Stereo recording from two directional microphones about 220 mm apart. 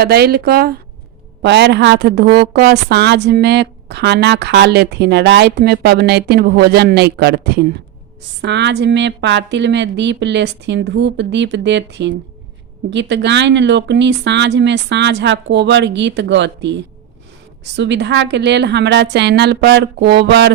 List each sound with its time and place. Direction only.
0.0 s a woman's voice: 45° right (ahead or behind)